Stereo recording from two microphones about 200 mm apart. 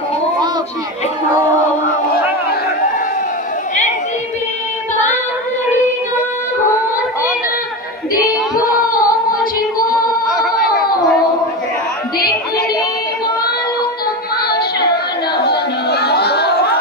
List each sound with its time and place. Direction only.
8.1 s music: 45° left (ahead or behind)
15.3 s chatter: 55° left (ahead or behind)